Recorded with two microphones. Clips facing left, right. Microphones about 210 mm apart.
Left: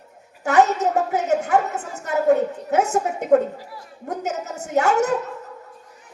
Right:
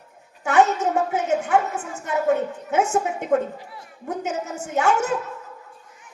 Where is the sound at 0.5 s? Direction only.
40° left (ahead or behind).